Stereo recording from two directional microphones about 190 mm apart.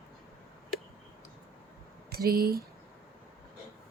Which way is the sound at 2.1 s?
55° right (ahead or behind).